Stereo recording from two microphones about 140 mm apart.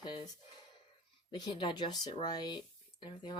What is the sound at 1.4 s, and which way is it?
Speech, 35° left (ahead or behind).